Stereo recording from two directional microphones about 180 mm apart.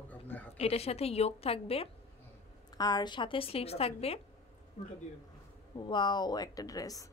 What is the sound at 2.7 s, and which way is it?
A woman's voice, 20° left (ahead or behind).